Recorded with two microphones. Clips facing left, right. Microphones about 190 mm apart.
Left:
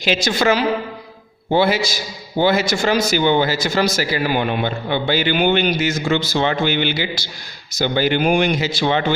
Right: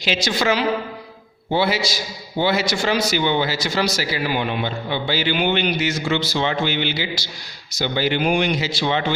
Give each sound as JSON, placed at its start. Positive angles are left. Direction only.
{"t": 0.0, "sound": "speech", "side_deg": 50}